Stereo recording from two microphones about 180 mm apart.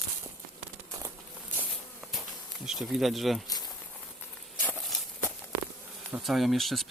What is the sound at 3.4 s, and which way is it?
Speech, 20° left (ahead or behind).